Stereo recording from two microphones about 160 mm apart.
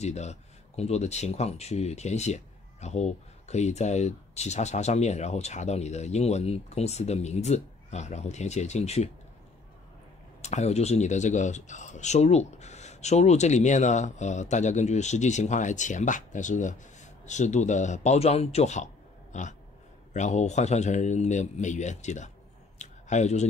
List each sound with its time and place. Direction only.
0.0 s speech: 45° left (ahead or behind)
10.4 s speech: 45° left (ahead or behind)
22.8 s a sound: 45° left (ahead or behind)